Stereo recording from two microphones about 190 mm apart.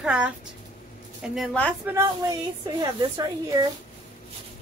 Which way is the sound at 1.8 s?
15° right (ahead or behind).